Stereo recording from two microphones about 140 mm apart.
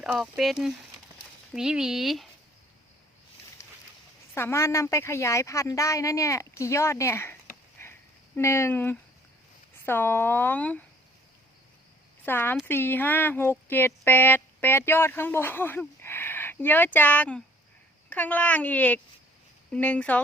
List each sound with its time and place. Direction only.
0.0 s speech: 5° right (ahead or behind)
3.6 s a sound: 20° left (ahead or behind)
4.4 s speech: 20° left (ahead or behind)
7.8 s sniff: 20° left (ahead or behind)
8.4 s speech: 20° left (ahead or behind)
12.2 s speech: 15° left (ahead or behind)